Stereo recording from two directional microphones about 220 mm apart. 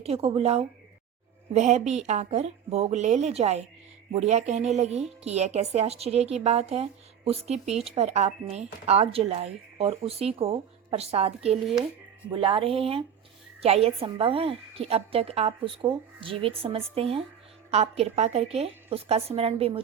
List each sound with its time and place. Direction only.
0.0 s a woman's voice: 25° right (ahead or behind)